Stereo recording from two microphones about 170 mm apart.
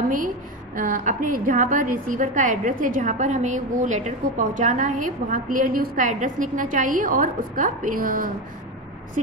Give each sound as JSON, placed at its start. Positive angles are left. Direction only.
{"t": 0.7, "sound": "a woman's voice", "side_deg": -55}